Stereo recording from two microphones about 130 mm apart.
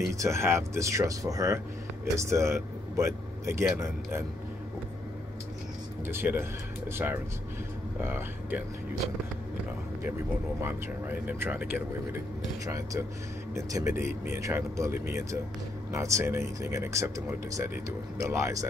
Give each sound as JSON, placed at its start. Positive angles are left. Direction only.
{"t": 0.1, "sound": "speech", "side_deg": -25}
{"t": 6.0, "sound": "speech", "side_deg": -15}
{"t": 8.0, "sound": "speech", "side_deg": -15}
{"t": 10.6, "sound": "speech", "side_deg": -15}